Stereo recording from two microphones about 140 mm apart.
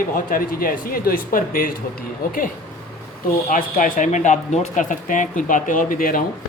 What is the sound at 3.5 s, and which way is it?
Speech, 70° left (ahead or behind).